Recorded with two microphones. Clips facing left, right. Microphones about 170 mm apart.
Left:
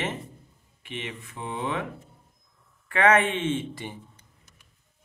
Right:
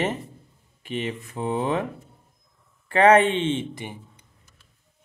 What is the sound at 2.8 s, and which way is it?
A man's voice, 35° right (ahead or behind).